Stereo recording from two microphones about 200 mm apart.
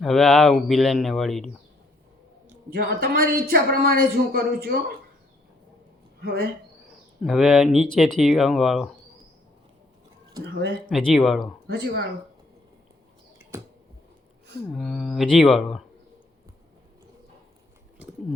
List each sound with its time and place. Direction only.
0.0 s speech: centre (ahead or behind)
2.7 s speech: 45° right (ahead or behind)
6.2 s speech: 50° right (ahead or behind)
7.3 s speech: centre (ahead or behind)
10.8 s speech: centre (ahead or behind)
11.7 s speech: 55° right (ahead or behind)
14.7 s speech: centre (ahead or behind)